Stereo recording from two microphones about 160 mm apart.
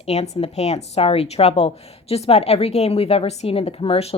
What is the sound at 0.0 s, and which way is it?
Speech, 40° left (ahead or behind).